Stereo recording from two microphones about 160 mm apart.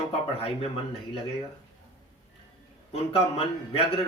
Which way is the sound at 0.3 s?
35° left (ahead or behind).